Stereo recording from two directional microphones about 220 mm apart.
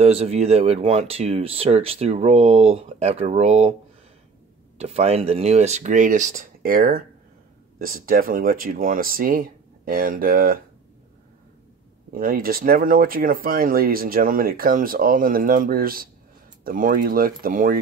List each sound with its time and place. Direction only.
0.0 s speech: 30° right (ahead or behind)
4.7 s speech: 30° right (ahead or behind)
12.1 s speech: 40° right (ahead or behind)